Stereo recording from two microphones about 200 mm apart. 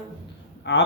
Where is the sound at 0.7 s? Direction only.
60° left (ahead or behind).